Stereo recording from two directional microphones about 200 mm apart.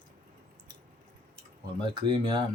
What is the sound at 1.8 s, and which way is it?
Speech, 25° right (ahead or behind).